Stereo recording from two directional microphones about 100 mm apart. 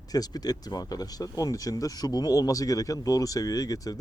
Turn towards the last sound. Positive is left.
turn(degrees=35)  # may be behind; listen again after turning